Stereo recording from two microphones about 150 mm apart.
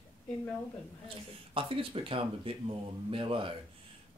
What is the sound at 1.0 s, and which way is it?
Speech, 35° right (ahead or behind).